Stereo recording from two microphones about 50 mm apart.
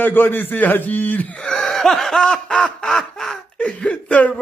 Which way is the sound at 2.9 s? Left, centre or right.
Centre.